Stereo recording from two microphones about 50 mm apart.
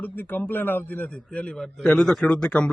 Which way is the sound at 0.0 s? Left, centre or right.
Left.